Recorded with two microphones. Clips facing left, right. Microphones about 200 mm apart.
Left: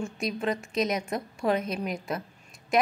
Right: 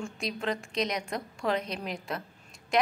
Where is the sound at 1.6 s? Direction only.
5° left (ahead or behind).